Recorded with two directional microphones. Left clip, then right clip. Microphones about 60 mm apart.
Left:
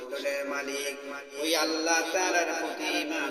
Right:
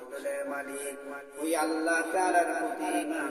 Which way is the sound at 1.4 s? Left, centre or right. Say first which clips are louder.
Left 2 dB; right.